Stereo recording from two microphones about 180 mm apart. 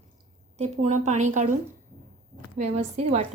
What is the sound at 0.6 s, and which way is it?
A woman's voice, 40° right (ahead or behind).